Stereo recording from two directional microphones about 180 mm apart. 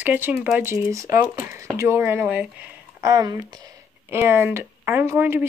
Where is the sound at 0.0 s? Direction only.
10° right (ahead or behind).